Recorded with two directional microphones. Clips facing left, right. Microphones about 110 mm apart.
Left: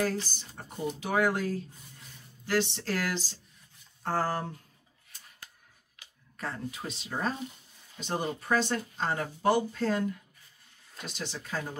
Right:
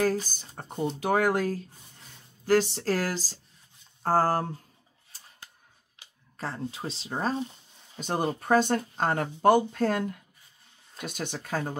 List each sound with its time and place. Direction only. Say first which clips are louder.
0.0 s speech: right 4 dB; 45° right (ahead or behind)
5.9 s speech: right 3 dB; 30° right (ahead or behind)
8.0 s speech: right 4 dB; 45° right (ahead or behind)